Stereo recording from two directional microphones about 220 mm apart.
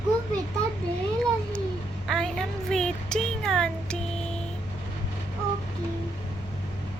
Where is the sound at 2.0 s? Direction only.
Centre (ahead or behind).